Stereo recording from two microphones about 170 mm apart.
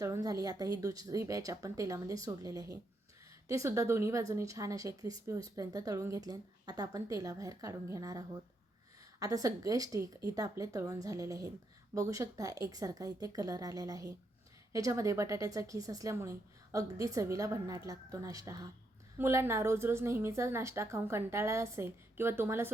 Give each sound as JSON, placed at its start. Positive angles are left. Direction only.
{"t": 0.0, "sound": "a woman's voice", "side_deg": -20}